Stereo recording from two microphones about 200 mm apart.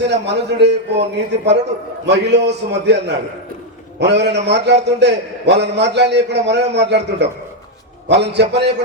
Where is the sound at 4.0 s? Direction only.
60° right (ahead or behind).